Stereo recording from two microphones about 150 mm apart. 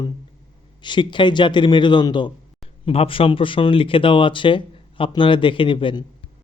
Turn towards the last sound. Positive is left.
turn(degrees=35)  # may be behind; listen again after turning